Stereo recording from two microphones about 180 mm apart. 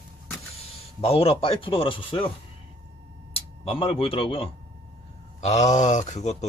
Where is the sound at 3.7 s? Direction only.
30° left (ahead or behind).